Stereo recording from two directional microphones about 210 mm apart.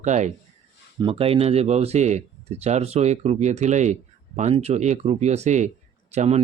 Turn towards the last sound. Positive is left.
turn(degrees=-30)  # may be behind; listen again after turning